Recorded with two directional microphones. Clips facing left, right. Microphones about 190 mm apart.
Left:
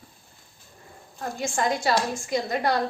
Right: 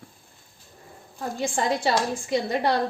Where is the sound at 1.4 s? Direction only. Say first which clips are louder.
Right 1 dB; 30° right (ahead or behind).